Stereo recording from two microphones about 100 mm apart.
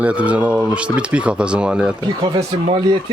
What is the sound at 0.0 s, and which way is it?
Speech, 15° right (ahead or behind).